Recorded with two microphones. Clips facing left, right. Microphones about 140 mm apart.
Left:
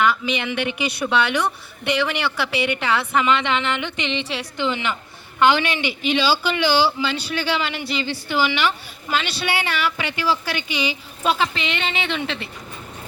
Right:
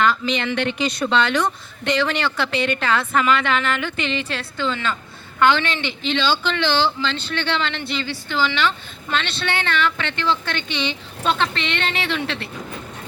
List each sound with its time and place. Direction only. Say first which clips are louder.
0.0 s speech: right 1 dB; 10° left (ahead or behind)